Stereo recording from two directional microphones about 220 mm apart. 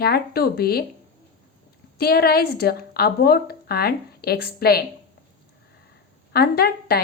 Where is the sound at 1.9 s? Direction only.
45° left (ahead or behind).